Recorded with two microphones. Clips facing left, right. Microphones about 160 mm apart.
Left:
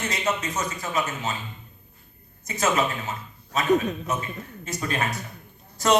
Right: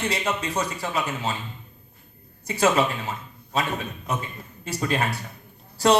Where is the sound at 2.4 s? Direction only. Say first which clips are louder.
Right 3 dB; 30° right (ahead or behind).